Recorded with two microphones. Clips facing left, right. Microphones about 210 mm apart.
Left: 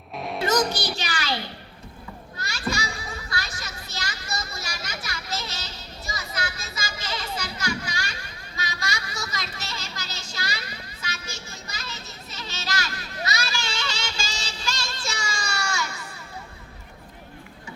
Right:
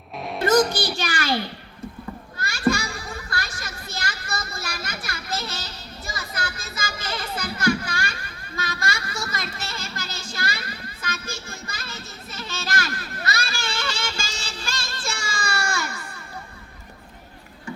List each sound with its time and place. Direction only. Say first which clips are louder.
0.2 s music: right 1 dB; centre (ahead or behind)
0.9 s a child's voice: right 5 dB; 50° right (ahead or behind)
2.4 s children playing: right 7 dB; 50° right (ahead or behind)
6.1 s music: even; 55° right (ahead or behind)
8.5 s speech: right 3 dB; 55° right (ahead or behind)
11.0 s music: right 5 dB; 55° right (ahead or behind)